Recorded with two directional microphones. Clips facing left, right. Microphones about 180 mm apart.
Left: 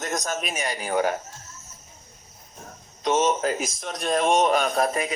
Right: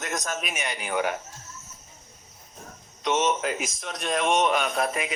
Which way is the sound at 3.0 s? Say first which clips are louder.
Left 3 dB; 40° left (ahead or behind).